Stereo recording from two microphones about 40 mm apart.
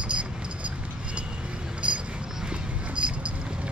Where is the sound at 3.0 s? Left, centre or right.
Right.